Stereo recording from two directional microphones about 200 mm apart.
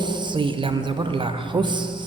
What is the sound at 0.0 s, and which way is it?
A man's voice, 25° right (ahead or behind).